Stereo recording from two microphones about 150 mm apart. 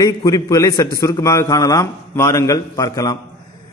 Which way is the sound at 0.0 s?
25° left (ahead or behind).